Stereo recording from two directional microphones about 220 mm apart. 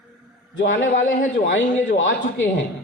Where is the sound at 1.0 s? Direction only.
35° left (ahead or behind).